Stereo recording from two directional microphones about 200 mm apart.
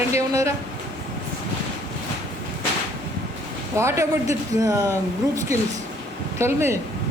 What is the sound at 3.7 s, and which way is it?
A man's voice, 15° right (ahead or behind).